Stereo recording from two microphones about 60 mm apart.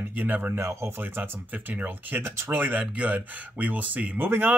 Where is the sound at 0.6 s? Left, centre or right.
Right.